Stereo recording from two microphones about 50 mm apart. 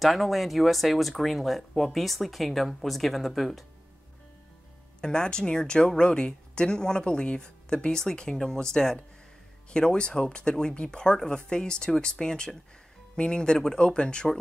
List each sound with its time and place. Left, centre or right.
0.0 s speech: centre
5.0 s speech: centre